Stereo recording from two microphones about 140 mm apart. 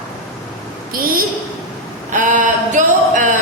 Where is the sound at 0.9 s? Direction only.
90° right.